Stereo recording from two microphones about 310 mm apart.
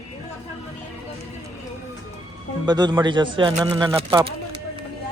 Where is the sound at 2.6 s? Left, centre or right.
Centre.